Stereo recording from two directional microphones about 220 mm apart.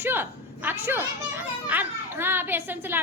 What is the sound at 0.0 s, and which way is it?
A woman's voice, 10° right (ahead or behind).